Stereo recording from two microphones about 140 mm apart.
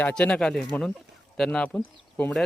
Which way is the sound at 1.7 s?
15° left (ahead or behind).